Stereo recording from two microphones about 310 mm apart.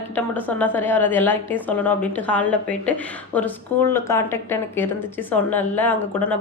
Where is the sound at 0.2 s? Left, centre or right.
Centre.